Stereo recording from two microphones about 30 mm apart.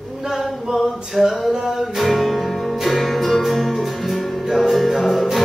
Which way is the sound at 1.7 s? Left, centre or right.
Centre.